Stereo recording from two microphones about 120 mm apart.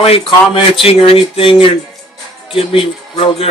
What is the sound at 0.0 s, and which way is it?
Speech, 50° left (ahead or behind).